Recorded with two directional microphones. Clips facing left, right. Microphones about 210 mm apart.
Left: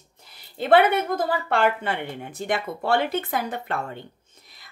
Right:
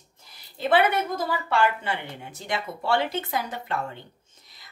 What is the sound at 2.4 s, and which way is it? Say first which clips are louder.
A woman's voice: left 4 dB; 55° left (ahead or behind).